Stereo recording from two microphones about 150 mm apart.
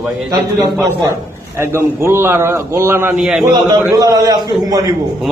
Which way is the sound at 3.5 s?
25° right (ahead or behind).